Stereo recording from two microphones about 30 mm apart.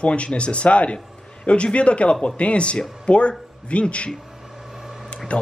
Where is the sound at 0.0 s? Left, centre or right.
Left.